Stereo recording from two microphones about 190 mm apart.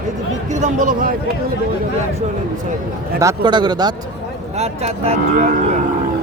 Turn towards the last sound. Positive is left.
turn(degrees=-35)  # may be behind; listen again after turning